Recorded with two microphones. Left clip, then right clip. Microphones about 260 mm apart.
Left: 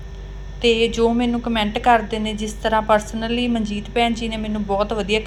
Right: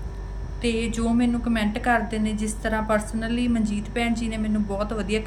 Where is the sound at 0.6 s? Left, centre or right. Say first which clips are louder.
Left 10 dB; centre.